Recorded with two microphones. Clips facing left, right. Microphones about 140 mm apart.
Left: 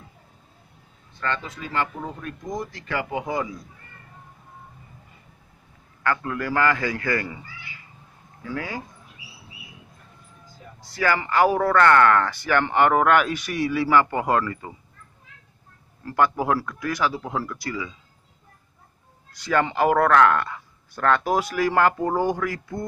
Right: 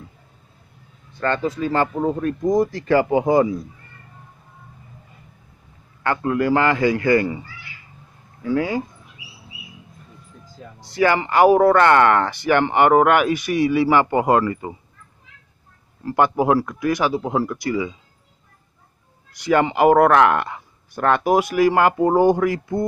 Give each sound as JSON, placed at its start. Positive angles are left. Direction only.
{"t": 1.2, "sound": "speech", "side_deg": -40}
{"t": 6.0, "sound": "speech", "side_deg": -25}
{"t": 8.5, "sound": "speech", "side_deg": -25}
{"t": 10.9, "sound": "speech", "side_deg": -20}
{"t": 16.0, "sound": "speech", "side_deg": -20}
{"t": 19.3, "sound": "speech", "side_deg": -15}